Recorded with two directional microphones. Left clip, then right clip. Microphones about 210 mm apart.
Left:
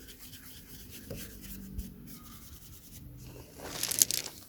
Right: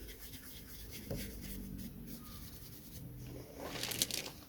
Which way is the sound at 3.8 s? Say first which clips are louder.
Left 7 dB; 35° left (ahead or behind).